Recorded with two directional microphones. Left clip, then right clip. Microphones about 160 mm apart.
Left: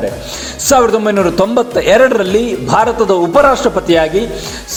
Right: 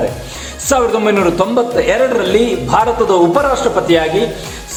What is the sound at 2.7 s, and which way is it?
Speech, 25° left (ahead or behind).